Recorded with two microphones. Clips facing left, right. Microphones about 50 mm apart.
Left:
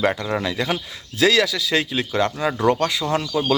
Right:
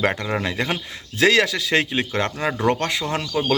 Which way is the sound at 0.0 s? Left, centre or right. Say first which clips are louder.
Left 1 dB; right.